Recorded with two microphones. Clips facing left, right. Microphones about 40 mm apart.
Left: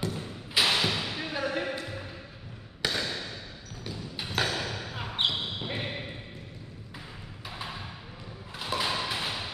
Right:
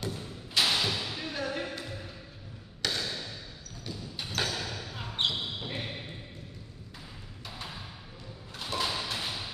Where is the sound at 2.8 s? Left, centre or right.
Centre.